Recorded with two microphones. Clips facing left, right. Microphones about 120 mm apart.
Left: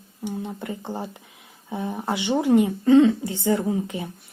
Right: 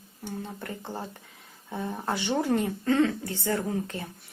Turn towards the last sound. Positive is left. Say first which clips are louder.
# left 5 dB
turn(degrees=15)  # may be behind; listen again after turning